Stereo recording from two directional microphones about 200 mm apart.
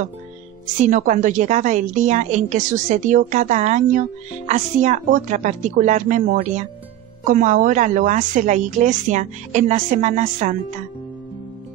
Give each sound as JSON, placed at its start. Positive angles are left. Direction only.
{"t": 0.8, "sound": "a woman's voice", "side_deg": -40}